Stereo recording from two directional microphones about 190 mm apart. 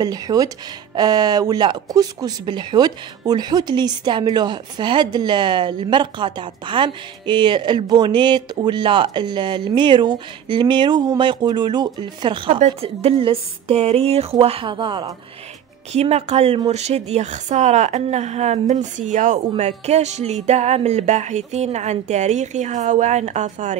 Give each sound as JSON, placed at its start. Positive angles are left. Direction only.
{"t": 0.0, "sound": "speech", "side_deg": -20}